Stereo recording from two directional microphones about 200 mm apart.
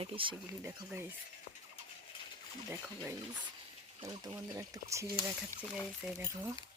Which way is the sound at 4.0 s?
25° right (ahead or behind).